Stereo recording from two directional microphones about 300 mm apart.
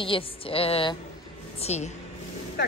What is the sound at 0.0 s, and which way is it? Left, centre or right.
A woman's voice, centre.